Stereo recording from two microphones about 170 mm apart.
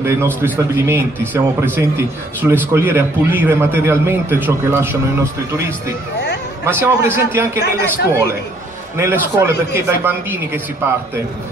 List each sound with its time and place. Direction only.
0.0 s a man's voice: 15° right (ahead or behind)
6.6 s a man's voice: 15° right (ahead or behind)